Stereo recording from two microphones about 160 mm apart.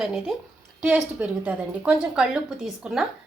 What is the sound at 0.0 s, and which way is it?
A woman's voice, centre (ahead or behind).